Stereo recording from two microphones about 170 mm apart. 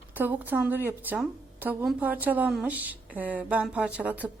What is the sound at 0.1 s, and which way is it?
A woman's voice, 10° right (ahead or behind).